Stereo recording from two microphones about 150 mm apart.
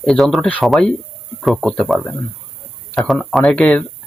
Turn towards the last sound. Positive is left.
turn(degrees=5)  # may be behind; listen again after turning